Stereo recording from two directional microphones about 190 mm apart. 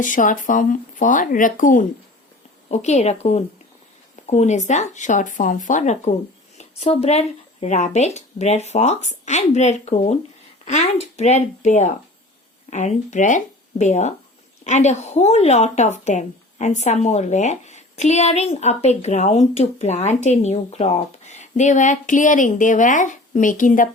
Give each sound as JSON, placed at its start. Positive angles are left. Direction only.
{"t": 0.0, "sound": "speech", "side_deg": 45}